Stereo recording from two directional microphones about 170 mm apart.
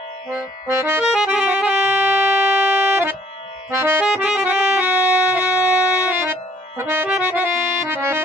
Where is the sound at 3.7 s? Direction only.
15° right (ahead or behind).